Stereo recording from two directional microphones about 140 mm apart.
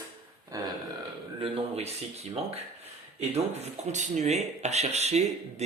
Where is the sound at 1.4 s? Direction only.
45° right (ahead or behind).